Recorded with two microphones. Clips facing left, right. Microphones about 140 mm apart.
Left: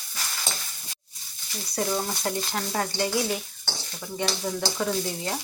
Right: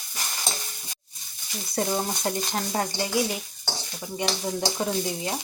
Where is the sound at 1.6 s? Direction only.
20° right (ahead or behind).